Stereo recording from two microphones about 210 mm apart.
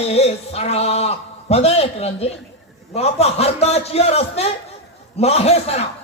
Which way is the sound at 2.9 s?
30° left (ahead or behind).